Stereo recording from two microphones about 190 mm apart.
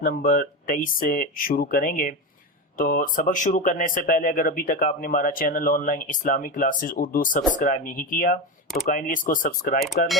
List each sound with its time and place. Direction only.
0.0 s speech: 50° left (ahead or behind)